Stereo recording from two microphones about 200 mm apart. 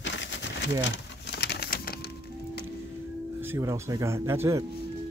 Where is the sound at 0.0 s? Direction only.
65° left (ahead or behind).